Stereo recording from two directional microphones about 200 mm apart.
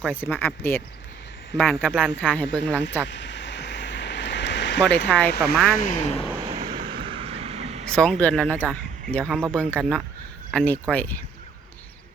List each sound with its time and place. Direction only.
0.0 s speech: 10° left (ahead or behind)
3.1 s a sound: 65° left (ahead or behind)
5.0 s speech: 5° left (ahead or behind)
5.3 s speech: 55° left (ahead or behind)
5.7 s speech: 40° left (ahead or behind)
6.4 s vehicle: 30° right (ahead or behind)
7.9 s speech: 5° left (ahead or behind)